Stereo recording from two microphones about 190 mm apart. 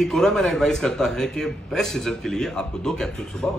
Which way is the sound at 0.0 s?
5° left (ahead or behind).